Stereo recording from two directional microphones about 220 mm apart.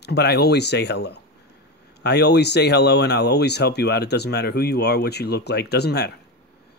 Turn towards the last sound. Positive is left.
turn(degrees=50)  # may be behind; listen again after turning